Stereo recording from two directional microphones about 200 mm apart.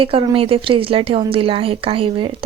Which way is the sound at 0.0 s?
25° right (ahead or behind).